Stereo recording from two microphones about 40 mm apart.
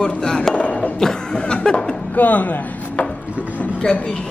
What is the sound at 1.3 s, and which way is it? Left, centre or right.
Speech, left.